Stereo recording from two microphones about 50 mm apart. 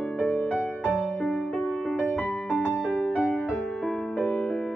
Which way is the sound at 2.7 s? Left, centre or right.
Centre.